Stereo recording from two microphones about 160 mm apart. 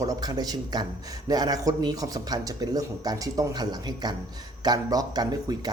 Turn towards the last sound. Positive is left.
turn(degrees=-25)  # may be behind; listen again after turning